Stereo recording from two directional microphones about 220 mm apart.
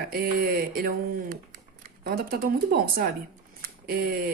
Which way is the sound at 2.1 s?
40° right (ahead or behind).